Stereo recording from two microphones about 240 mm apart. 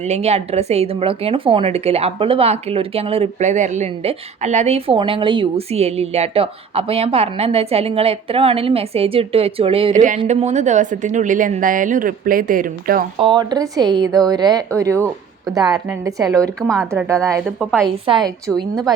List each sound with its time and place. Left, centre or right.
0.0 s a woman's voice: right
13.1 s a woman's voice: centre
16.6 s a woman's voice: centre
16.9 s a woman's voice: centre
17.4 s a woman's voice: centre
17.8 s a woman's voice: centre